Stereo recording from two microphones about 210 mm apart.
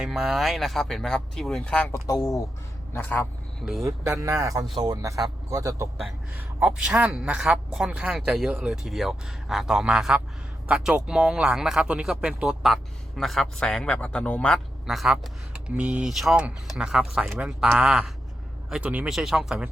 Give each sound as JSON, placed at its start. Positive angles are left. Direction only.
{"t": 0.0, "sound": "a man's voice", "side_deg": 0}
{"t": 3.8, "sound": "speech", "side_deg": -15}